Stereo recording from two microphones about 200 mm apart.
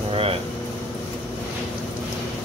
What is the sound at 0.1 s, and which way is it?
Air conditioning, 30° right (ahead or behind).